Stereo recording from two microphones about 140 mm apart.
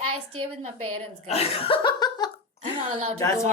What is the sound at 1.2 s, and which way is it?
Speech, 45° left (ahead or behind).